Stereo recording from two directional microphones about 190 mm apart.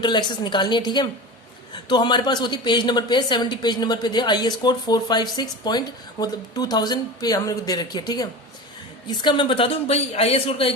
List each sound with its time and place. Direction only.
0.0 s a woman's voice: 25° left (ahead or behind)